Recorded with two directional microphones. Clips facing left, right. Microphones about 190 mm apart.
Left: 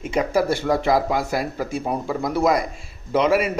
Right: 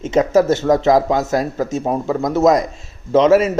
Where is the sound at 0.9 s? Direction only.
45° right (ahead or behind).